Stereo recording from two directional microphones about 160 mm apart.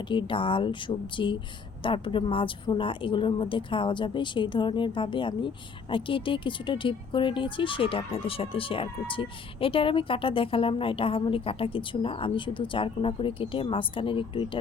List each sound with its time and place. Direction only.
0.1 s speech: 30° left (ahead or behind)